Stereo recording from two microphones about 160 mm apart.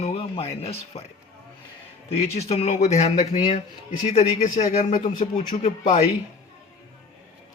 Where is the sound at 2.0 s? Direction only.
40° left (ahead or behind).